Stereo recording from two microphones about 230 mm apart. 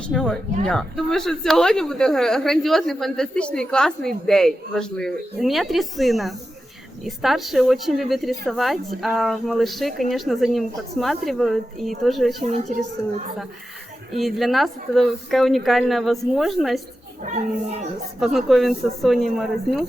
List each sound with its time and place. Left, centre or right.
0.1 s a woman's voice: centre
14.1 s a woman's voice: centre
17.2 s a child's voice: right
18.3 s a woman's voice: centre